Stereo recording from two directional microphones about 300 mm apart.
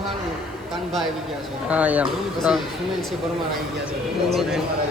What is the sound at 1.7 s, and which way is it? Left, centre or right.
Speech, centre.